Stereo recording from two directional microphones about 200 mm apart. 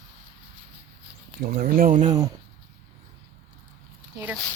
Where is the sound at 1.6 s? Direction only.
45° right (ahead or behind).